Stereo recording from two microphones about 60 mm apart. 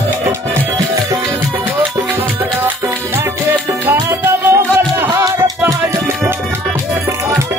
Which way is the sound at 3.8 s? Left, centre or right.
Right.